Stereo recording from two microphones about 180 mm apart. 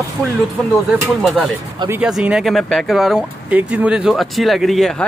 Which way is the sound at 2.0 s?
5° right (ahead or behind).